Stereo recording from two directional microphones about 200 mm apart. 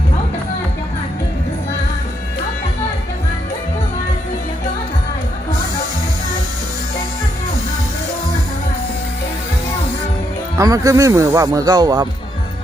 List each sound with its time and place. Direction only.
10.6 s speech: 15° right (ahead or behind)